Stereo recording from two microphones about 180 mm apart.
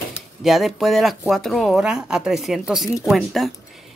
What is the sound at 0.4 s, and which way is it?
Speech, centre (ahead or behind).